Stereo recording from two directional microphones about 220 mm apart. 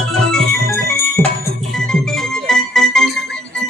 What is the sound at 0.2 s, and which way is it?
Organ, 5° left (ahead or behind).